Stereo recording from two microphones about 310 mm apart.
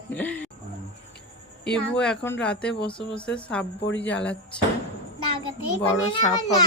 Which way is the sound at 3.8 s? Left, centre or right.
Left.